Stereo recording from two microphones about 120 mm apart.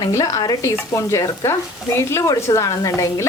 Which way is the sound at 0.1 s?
30° left (ahead or behind).